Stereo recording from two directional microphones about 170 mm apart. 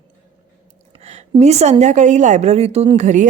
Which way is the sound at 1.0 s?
40° right (ahead or behind).